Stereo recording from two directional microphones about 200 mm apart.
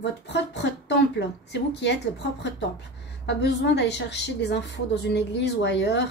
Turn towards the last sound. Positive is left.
turn(degrees=60)  # may be behind; listen again after turning